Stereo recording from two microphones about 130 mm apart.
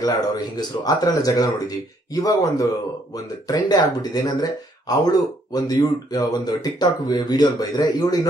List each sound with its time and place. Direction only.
0.0 s speech: 30° left (ahead or behind)